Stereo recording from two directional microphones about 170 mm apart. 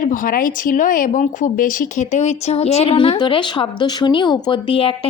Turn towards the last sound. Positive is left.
turn(degrees=30)  # may be behind; listen again after turning